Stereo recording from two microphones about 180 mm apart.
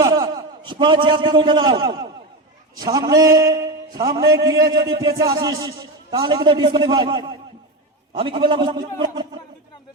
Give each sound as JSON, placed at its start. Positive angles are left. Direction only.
{"t": 0.0, "sound": "a man's voice", "side_deg": -20}